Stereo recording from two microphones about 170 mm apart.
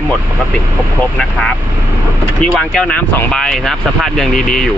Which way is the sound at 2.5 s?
5° left (ahead or behind).